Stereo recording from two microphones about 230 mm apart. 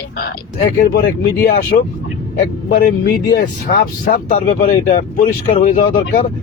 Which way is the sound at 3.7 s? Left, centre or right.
Left.